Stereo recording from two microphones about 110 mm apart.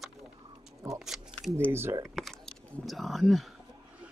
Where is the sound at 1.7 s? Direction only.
20° right (ahead or behind).